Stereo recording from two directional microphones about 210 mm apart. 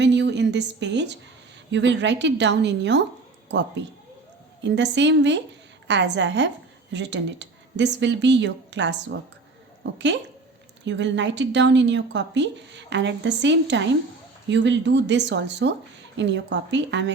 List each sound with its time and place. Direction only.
0.0 s a woman's voice: 55° right (ahead or behind)
10.8 s speech: 60° right (ahead or behind)